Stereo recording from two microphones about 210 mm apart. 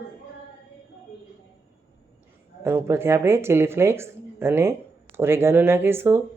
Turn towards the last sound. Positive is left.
turn(degrees=-10)  # may be behind; listen again after turning